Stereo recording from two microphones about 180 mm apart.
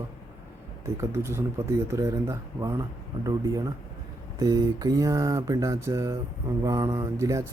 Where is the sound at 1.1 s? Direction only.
15° right (ahead or behind).